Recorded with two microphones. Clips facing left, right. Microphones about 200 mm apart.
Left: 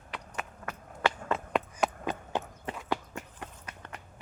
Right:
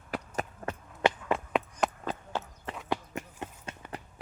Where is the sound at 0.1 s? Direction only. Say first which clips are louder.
Right 6 dB; 35° right (ahead or behind).